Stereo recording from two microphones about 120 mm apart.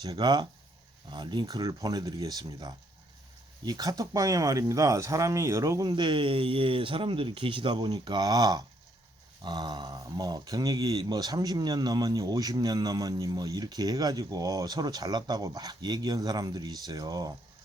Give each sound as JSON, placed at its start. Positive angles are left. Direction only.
{"t": 0.0, "sound": "speech", "side_deg": -35}